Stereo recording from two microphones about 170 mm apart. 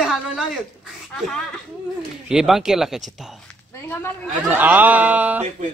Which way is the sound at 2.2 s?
5° right (ahead or behind).